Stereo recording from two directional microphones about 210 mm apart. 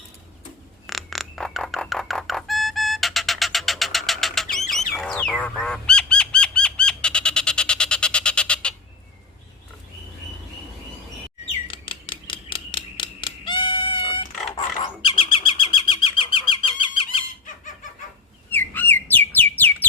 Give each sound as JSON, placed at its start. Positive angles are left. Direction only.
{"t": 0.9, "sound": "music", "side_deg": 0}
{"t": 4.5, "sound": "bird", "side_deg": 0}
{"t": 11.7, "sound": "a sound", "side_deg": 25}
{"t": 14.5, "sound": "bird", "side_deg": 25}
{"t": 18.5, "sound": "bird", "side_deg": 10}
{"t": 19.3, "sound": "music", "side_deg": 10}